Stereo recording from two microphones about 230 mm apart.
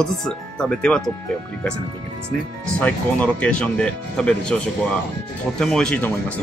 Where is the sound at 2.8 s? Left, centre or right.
Centre.